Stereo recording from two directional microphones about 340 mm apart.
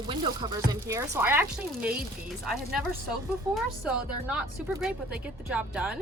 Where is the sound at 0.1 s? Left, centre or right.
Centre.